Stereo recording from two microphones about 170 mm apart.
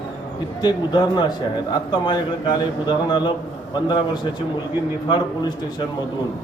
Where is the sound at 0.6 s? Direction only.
25° left (ahead or behind).